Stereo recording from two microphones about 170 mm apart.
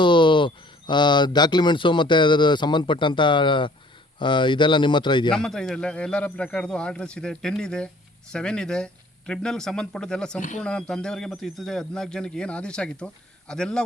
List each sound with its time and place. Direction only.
0.0 s speech: 30° left (ahead or behind)
5.3 s a man's voice: 5° left (ahead or behind)